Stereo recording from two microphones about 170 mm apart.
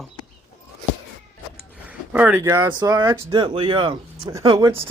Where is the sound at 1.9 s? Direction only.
10° right (ahead or behind).